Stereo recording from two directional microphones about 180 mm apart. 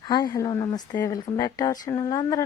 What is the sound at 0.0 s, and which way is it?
Speech, 25° left (ahead or behind).